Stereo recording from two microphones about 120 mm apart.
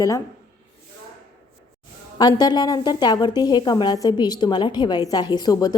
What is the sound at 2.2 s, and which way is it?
A woman's voice, 35° left (ahead or behind).